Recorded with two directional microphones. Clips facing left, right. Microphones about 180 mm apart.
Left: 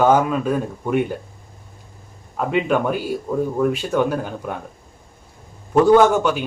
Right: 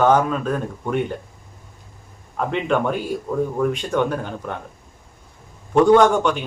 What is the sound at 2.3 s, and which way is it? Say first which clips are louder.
Speech: left 2 dB; 5° left (ahead or behind).